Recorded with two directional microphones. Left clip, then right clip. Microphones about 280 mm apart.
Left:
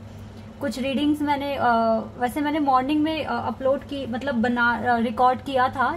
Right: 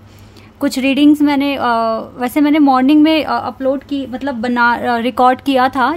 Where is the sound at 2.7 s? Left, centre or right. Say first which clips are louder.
Right 6 dB; right.